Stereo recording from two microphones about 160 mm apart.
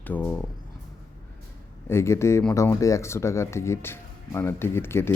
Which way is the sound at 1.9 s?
15° left (ahead or behind).